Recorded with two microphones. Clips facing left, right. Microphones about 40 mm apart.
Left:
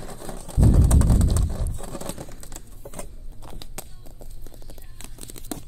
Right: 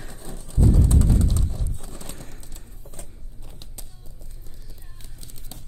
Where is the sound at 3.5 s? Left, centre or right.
Left.